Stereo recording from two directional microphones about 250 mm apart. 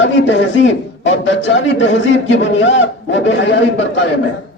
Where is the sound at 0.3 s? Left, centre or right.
Left.